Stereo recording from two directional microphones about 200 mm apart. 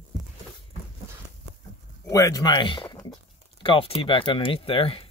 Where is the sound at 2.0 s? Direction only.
15° left (ahead or behind).